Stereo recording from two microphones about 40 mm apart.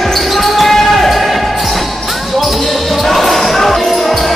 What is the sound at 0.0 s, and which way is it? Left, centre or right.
Basketball bounce, centre.